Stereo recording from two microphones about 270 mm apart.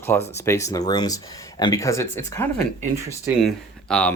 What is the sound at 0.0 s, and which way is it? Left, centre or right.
Speech, centre.